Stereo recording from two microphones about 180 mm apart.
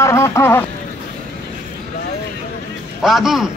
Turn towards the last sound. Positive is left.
turn(degrees=0)  # may be behind; listen again after turning